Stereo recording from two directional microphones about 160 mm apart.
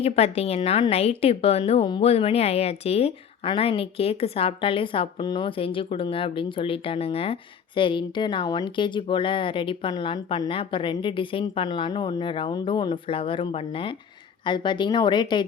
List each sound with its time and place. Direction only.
0.0 s a woman's voice: 40° left (ahead or behind)